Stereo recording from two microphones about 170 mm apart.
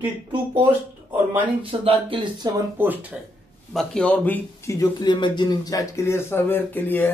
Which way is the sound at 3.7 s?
5° left (ahead or behind).